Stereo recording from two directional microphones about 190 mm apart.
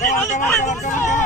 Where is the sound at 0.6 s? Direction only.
40° left (ahead or behind).